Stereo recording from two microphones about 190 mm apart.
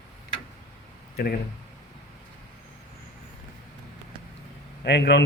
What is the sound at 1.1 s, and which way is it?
Speech, 55° left (ahead or behind).